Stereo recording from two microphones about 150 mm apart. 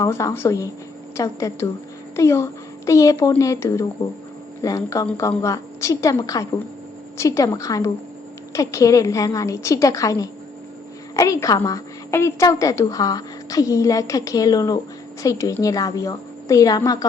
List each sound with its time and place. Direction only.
0.0 s a woman's voice: 20° left (ahead or behind)